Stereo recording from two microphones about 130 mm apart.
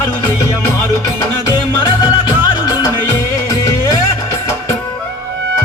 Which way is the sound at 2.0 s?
35° left (ahead or behind).